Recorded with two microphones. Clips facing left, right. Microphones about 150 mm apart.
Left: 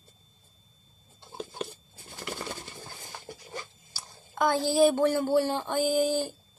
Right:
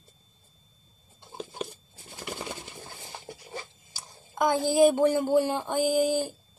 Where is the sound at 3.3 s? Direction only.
20° right (ahead or behind).